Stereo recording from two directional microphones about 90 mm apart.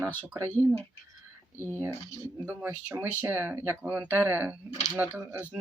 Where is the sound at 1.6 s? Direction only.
25° right (ahead or behind).